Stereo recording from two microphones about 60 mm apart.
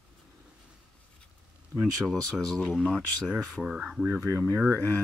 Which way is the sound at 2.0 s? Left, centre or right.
Centre.